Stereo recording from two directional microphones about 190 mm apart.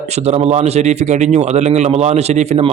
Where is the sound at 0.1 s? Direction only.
35° right (ahead or behind).